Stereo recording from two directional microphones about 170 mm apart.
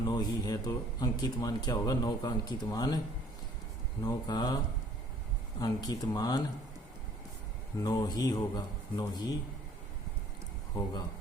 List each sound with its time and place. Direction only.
0.0 s speech: 25° left (ahead or behind)
4.0 s speech: 20° left (ahead or behind)
7.8 s speech: 20° left (ahead or behind)